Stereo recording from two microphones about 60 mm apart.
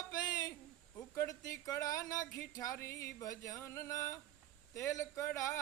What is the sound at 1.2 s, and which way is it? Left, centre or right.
Speech, left.